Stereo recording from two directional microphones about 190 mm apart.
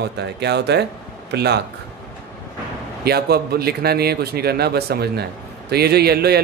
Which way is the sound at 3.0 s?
55° right (ahead or behind).